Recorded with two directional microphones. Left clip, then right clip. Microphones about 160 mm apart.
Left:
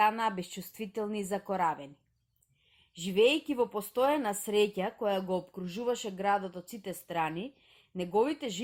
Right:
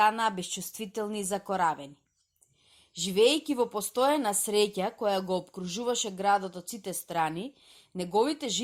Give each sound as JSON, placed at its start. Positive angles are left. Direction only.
{"t": 0.0, "sound": "a woman's voice", "side_deg": -25}
{"t": 3.0, "sound": "a woman's voice", "side_deg": -30}